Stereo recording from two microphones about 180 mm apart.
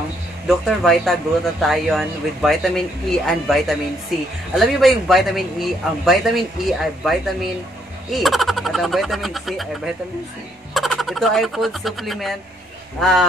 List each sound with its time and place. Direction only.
0.5 s speech: centre (ahead or behind)
10.7 s speech: centre (ahead or behind)